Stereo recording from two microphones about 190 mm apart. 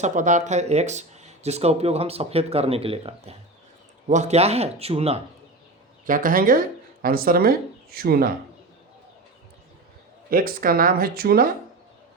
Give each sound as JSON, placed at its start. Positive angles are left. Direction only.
{"t": 0.0, "sound": "speech", "side_deg": -40}
{"t": 6.1, "sound": "speech", "side_deg": -45}
{"t": 10.2, "sound": "speech", "side_deg": -50}